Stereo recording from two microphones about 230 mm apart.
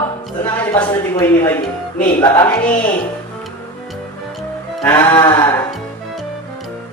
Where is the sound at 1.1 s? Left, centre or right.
Centre.